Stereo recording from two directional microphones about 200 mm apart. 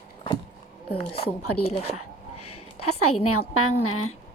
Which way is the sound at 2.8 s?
90° left.